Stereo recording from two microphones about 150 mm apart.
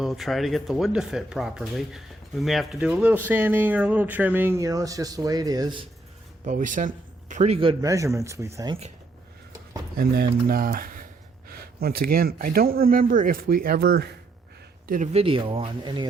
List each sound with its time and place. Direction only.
0.0 s speech: centre (ahead or behind); by 5.8 s 25° right (ahead or behind)
6.4 s a man's voice: 60° right (ahead or behind); by 7.8 s 40° right (ahead or behind)
7.8 s speech: 20° right (ahead or behind)
10.0 s speech: 85° right
11.8 s speech: 90° right
14.8 s speech: 60° right (ahead or behind)
15.1 s speech: 35° right (ahead or behind)